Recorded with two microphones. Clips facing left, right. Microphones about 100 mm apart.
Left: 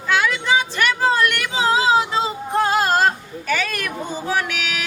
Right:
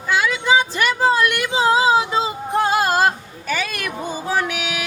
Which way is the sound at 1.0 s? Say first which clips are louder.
Right 2 dB; 15° right (ahead or behind).